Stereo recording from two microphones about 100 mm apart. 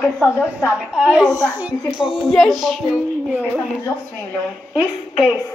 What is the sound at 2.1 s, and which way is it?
Speech, centre (ahead or behind).